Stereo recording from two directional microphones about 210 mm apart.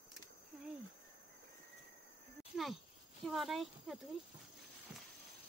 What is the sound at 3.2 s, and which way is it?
Speech, centre (ahead or behind).